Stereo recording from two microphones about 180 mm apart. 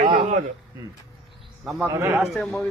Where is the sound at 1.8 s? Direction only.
15° right (ahead or behind).